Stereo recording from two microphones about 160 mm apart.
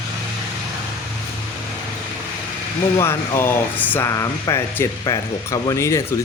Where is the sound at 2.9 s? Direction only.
15° left (ahead or behind).